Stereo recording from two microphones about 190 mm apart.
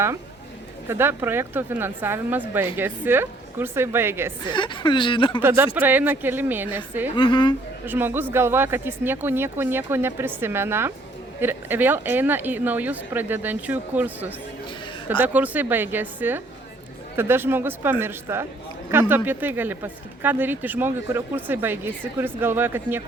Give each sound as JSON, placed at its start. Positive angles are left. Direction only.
{"t": 0.9, "sound": "speech", "side_deg": -10}
{"t": 4.4, "sound": "a woman's voice", "side_deg": 25}
{"t": 5.4, "sound": "speech", "side_deg": -10}
{"t": 7.2, "sound": "a woman's voice", "side_deg": 25}
{"t": 7.9, "sound": "speech", "side_deg": -10}